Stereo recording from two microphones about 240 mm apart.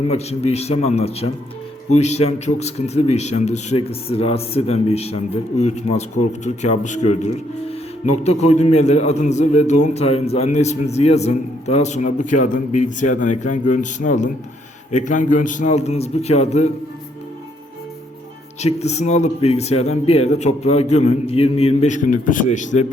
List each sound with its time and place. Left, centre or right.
0.1 s a man's voice: left
18.6 s a man's voice: left